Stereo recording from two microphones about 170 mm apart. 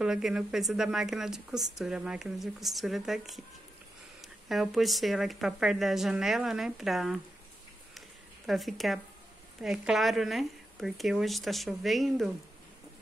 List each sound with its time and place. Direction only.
0.0 s speech: 5° right (ahead or behind)
8.5 s speech: centre (ahead or behind)